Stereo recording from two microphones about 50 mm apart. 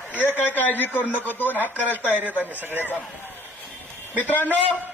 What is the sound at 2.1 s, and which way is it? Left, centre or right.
Speech, right.